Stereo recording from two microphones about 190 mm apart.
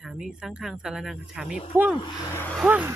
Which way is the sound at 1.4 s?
35° left (ahead or behind).